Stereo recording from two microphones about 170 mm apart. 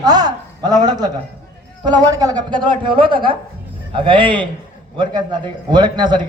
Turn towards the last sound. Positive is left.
turn(degrees=-25)  # may be behind; listen again after turning